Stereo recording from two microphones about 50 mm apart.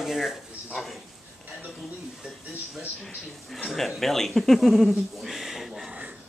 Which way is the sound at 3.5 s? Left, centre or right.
Centre.